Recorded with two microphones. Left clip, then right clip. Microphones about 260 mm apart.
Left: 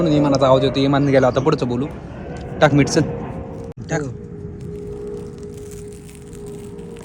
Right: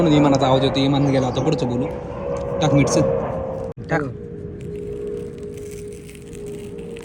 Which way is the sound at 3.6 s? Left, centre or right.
Centre.